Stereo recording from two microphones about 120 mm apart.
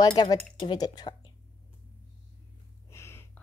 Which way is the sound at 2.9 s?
20° left (ahead or behind).